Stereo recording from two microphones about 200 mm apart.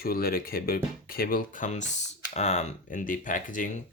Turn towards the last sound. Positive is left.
turn(degrees=40)  # may be behind; listen again after turning